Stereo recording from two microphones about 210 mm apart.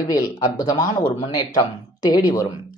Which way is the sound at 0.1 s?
20° left (ahead or behind).